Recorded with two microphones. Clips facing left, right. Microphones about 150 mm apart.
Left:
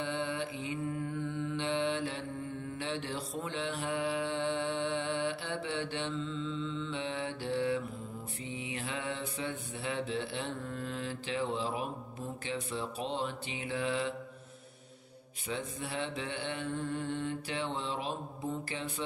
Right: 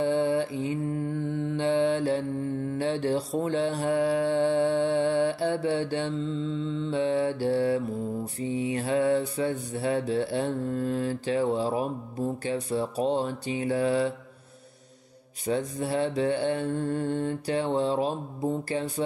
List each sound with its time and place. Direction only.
0.0 s mantra: 40° right (ahead or behind)
15.4 s mantra: 40° right (ahead or behind)